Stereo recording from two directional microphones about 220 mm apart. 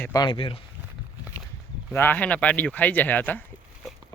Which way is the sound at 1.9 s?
10° left (ahead or behind).